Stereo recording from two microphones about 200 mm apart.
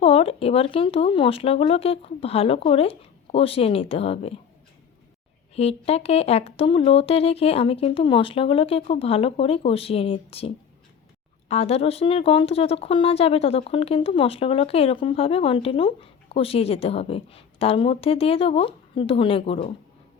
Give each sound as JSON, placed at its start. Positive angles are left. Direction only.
{"t": 0.0, "sound": "speech", "side_deg": 30}
{"t": 5.5, "sound": "speech", "side_deg": 30}